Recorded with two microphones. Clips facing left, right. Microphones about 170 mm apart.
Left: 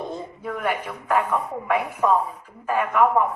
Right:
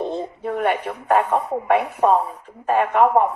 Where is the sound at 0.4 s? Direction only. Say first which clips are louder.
Right 5 dB; 35° right (ahead or behind).